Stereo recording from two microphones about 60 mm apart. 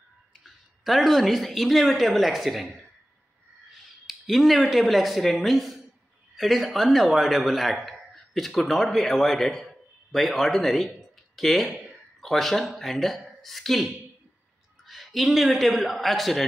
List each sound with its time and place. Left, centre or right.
0.8 s a man's voice: centre